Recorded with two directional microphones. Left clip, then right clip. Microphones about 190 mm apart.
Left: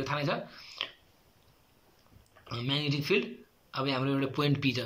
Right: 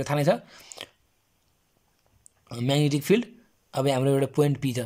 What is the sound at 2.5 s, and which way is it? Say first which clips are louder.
Speech: right 7 dB; 55° right (ahead or behind).